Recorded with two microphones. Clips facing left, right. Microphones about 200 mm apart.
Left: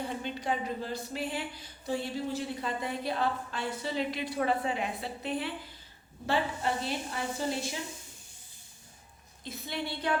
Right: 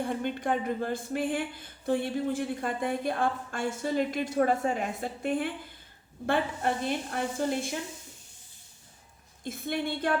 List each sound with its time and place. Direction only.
0.0 s speech: 55° right (ahead or behind)
9.4 s speech: 50° right (ahead or behind)